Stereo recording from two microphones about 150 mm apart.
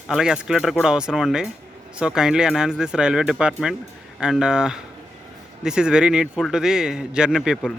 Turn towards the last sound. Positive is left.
turn(degrees=0)  # may be behind; listen again after turning